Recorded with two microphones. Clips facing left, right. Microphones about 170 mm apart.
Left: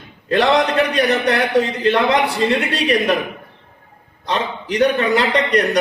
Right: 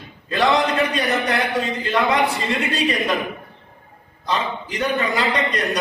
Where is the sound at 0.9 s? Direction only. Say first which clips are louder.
Left 5 dB; 70° left (ahead or behind).